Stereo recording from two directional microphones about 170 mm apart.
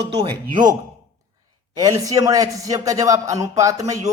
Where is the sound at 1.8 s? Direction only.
20° right (ahead or behind).